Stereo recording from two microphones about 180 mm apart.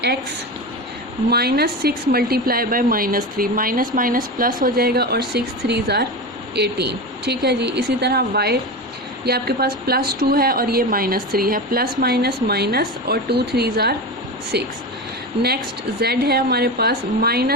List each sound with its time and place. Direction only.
1.3 s speech: 60° right (ahead or behind)
15.3 s speech: 25° right (ahead or behind)
16.0 s speech: 60° right (ahead or behind)